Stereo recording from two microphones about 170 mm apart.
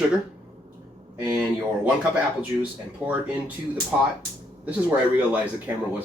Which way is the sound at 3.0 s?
5° right (ahead or behind).